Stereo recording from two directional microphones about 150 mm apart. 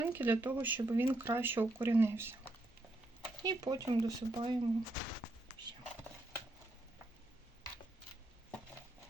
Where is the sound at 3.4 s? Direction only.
25° right (ahead or behind).